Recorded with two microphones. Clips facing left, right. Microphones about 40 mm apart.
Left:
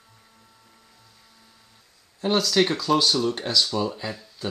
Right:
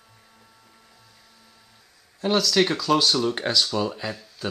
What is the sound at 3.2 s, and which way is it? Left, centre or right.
Speech, centre.